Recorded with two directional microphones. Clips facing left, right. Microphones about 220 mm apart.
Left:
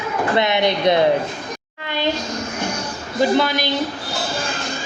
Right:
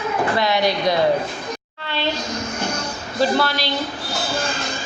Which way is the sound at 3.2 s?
15° left (ahead or behind).